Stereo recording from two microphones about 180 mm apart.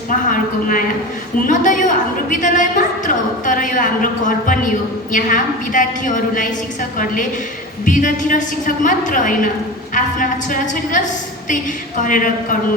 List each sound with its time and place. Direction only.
0.3 s a woman's voice: 50° left (ahead or behind)
12.0 s a woman's voice: 45° left (ahead or behind)